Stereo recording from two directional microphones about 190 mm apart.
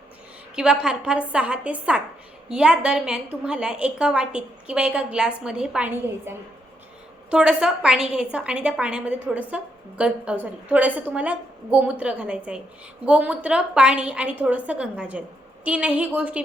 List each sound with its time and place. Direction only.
0.5 s a woman's voice: 5° right (ahead or behind)